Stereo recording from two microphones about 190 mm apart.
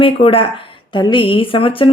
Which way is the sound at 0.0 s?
30° left (ahead or behind).